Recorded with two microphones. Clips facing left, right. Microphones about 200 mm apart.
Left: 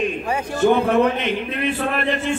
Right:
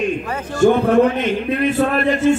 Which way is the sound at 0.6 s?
45° right (ahead or behind).